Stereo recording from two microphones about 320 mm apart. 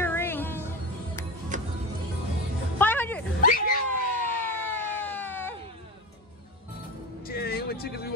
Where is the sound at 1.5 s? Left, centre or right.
Right.